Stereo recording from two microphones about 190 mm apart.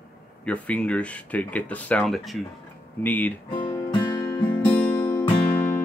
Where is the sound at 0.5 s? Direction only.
5° left (ahead or behind).